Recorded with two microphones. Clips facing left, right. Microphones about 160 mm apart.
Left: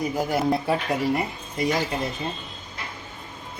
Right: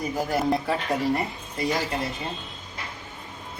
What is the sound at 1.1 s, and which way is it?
Speech, 20° left (ahead or behind).